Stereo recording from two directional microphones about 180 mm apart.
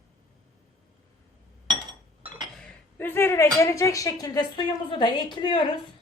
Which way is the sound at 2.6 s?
10° left (ahead or behind).